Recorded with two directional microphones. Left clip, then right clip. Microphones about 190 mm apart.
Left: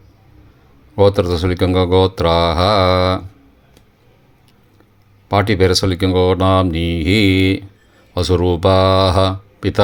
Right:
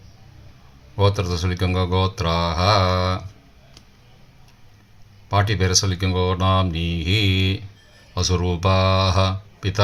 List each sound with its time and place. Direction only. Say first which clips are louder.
0.9 s speech: left 9 dB; 45° left (ahead or behind)
5.3 s speech: left 7 dB; 45° left (ahead or behind)